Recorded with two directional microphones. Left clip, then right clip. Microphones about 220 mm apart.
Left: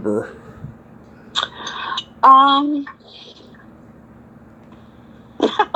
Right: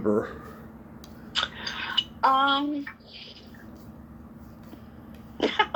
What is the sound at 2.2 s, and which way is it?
Speech, 20° left (ahead or behind).